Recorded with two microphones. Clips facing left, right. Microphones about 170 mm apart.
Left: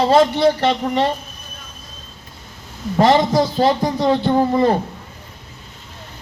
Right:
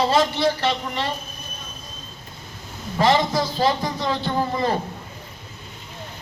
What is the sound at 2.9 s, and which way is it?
A man's voice, 50° left (ahead or behind).